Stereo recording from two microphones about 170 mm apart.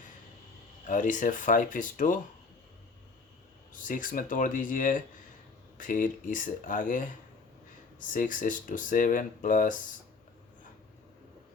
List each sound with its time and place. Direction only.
0.9 s speech: 50° left (ahead or behind)
3.7 s speech: 50° left (ahead or behind)